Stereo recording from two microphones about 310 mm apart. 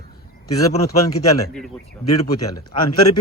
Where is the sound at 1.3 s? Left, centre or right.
Centre.